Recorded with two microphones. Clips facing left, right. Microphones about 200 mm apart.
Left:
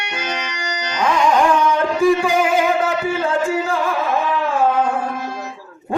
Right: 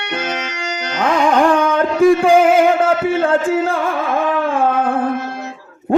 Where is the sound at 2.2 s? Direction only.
55° right (ahead or behind).